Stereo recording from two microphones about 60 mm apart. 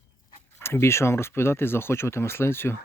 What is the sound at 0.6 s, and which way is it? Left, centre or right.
Speech, left.